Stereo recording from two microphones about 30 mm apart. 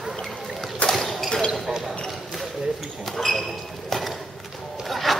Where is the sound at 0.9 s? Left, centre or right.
Centre.